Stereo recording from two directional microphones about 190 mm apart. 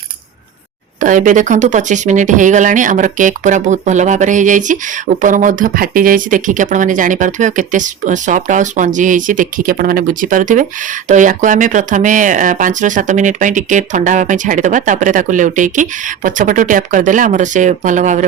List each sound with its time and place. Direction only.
0.9 s speech: 45° right (ahead or behind)